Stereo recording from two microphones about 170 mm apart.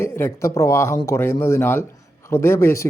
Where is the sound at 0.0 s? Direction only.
15° left (ahead or behind).